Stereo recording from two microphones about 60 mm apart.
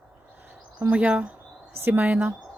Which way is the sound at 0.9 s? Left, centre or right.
Centre.